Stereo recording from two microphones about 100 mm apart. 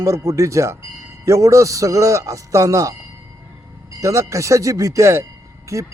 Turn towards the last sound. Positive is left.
turn(degrees=-30)  # may be behind; listen again after turning